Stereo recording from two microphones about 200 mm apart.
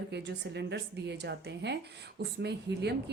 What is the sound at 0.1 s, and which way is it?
Speech, 60° right (ahead or behind).